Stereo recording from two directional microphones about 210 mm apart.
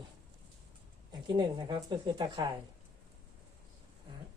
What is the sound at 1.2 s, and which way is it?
Speech, 20° right (ahead or behind).